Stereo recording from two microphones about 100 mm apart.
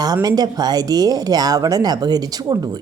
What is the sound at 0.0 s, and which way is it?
Speech, 40° right (ahead or behind).